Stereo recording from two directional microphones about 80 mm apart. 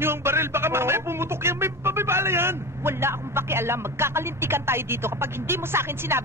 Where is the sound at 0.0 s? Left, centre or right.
Right.